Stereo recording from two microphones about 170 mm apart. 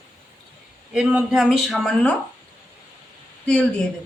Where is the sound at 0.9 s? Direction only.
5° right (ahead or behind).